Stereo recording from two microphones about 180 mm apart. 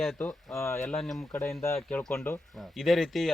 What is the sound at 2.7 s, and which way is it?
Speech, centre (ahead or behind).